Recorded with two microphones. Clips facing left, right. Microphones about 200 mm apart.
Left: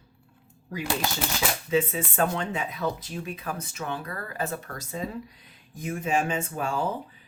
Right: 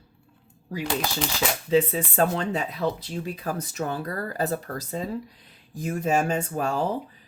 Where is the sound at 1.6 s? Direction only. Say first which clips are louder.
Right 4 dB; 35° right (ahead or behind).